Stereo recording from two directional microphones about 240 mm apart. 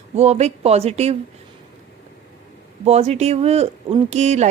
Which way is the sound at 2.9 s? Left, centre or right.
Right.